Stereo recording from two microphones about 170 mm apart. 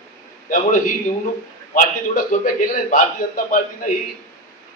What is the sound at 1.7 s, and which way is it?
A man's voice, 50° left (ahead or behind).